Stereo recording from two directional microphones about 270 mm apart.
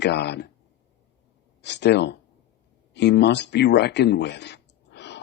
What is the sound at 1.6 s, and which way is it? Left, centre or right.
A man's voice, left.